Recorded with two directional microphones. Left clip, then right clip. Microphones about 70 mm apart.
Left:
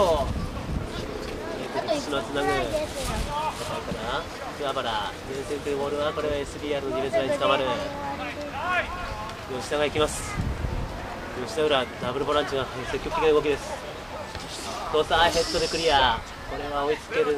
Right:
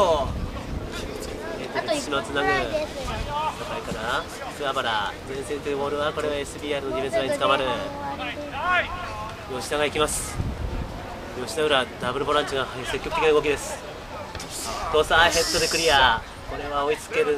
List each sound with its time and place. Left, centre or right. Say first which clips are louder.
1.8 s a sound: right 2 dB; right
2.4 s speech: right 2 dB; centre
4.6 s speech: right 3 dB; right
11.5 s speech: right 2 dB; right
13.3 s speech: right 1 dB; right
14.9 s speech: right 3 dB; right